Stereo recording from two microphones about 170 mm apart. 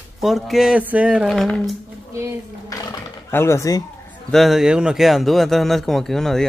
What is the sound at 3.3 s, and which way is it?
Speech, 15° left (ahead or behind).